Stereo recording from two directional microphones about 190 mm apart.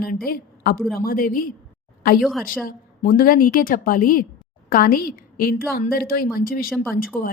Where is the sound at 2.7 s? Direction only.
45° left (ahead or behind).